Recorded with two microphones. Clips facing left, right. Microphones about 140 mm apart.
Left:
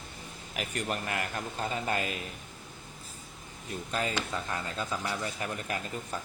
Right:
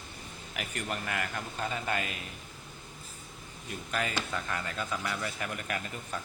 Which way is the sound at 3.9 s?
30° left (ahead or behind).